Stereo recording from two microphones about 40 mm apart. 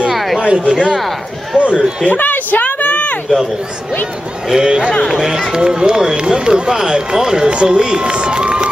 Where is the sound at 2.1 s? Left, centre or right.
Left.